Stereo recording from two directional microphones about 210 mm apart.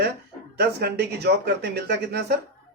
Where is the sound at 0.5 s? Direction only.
50° right (ahead or behind).